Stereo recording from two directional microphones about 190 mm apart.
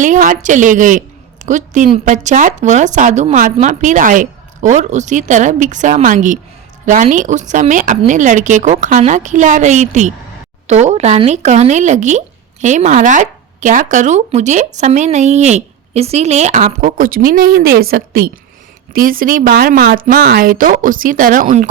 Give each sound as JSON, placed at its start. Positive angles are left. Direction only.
{"t": 0.0, "sound": "speech", "side_deg": -45}